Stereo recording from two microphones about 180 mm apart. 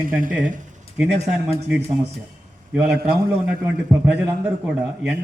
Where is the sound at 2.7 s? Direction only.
5° right (ahead or behind).